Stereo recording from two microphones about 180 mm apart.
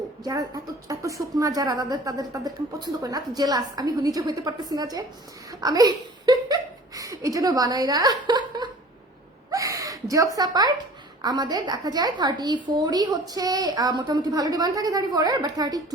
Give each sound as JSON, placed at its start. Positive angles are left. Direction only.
{"t": 0.3, "sound": "a woman's voice", "side_deg": -20}
{"t": 5.5, "sound": "a sound", "side_deg": -20}
{"t": 9.5, "sound": "gasp", "side_deg": -20}
{"t": 11.2, "sound": "a woman's voice", "side_deg": -25}